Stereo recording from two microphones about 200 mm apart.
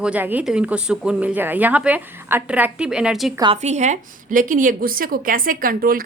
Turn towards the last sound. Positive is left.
turn(degrees=-45)  # may be behind; listen again after turning